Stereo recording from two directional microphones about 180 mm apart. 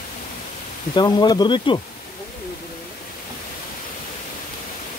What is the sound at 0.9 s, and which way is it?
Speech, 25° left (ahead or behind).